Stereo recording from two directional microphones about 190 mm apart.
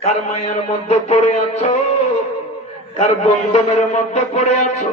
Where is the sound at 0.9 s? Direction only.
35° left (ahead or behind).